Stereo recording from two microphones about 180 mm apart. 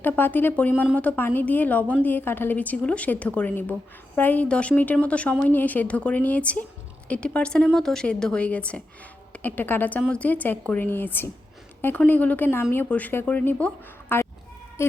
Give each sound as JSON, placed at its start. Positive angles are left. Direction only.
{"t": 0.0, "sound": "a woman's voice", "side_deg": 10}